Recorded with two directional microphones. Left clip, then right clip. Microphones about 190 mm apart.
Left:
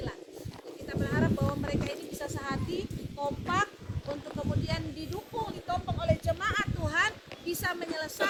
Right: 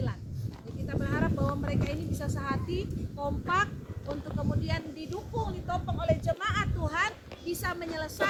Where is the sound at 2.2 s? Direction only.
25° right (ahead or behind).